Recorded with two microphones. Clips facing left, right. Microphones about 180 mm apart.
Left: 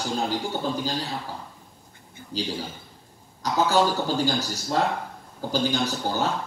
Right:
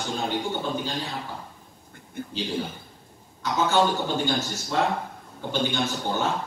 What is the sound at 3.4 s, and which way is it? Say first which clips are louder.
A man's voice: left 1 dB; 35° left (ahead or behind).